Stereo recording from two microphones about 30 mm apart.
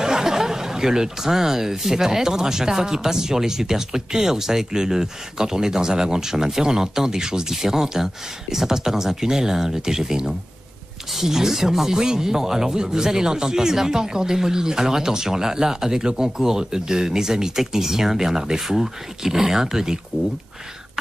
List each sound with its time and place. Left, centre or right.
0.0 s speech: centre